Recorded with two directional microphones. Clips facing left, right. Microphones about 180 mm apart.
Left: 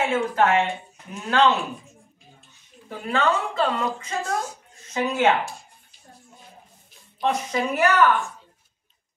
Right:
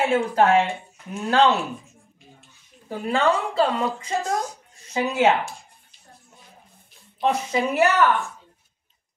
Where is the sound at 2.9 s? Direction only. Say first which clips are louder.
Right 2 dB; 30° right (ahead or behind).